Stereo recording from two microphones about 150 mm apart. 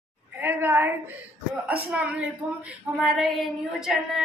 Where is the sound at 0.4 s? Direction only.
15° right (ahead or behind).